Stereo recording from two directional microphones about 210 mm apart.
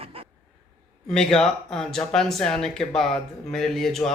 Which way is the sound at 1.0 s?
5° left (ahead or behind).